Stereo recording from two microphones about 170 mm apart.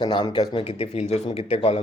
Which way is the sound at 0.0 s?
25° left (ahead or behind).